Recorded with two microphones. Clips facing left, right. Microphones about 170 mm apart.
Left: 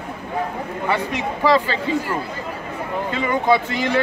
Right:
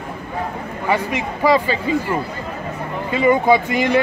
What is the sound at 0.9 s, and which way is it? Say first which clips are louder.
Speech: right 3 dB; 10° right (ahead or behind).